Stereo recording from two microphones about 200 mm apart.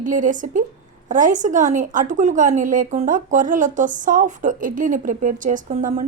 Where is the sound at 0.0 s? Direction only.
40° right (ahead or behind).